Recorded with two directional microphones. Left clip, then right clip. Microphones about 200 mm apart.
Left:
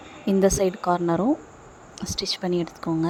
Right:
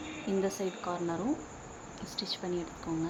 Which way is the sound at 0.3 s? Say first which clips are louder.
Left 13 dB; 45° left (ahead or behind).